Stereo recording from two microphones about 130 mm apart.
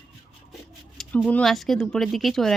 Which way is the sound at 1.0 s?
5° left (ahead or behind).